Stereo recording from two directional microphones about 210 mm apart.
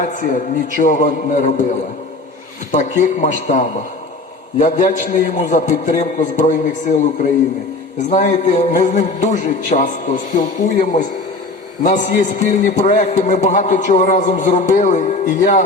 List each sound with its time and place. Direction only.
0.0 s a man's voice: 40° left (ahead or behind)
2.7 s a man's voice: 35° left (ahead or behind)